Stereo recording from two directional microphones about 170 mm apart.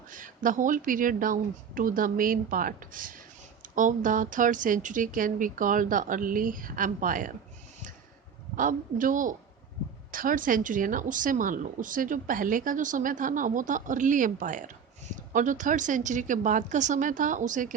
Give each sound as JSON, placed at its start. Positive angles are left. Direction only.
{"t": 0.1, "sound": "speech", "side_deg": -50}
{"t": 8.5, "sound": "speech", "side_deg": -50}